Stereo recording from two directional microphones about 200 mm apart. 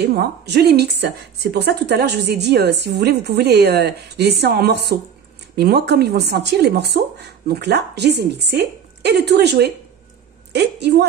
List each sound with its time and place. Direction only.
0.0 s a woman's voice: 55° right (ahead or behind)